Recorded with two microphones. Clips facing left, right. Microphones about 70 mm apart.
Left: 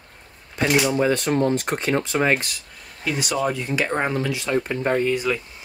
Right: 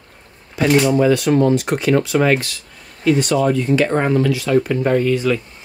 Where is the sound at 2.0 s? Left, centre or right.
Left.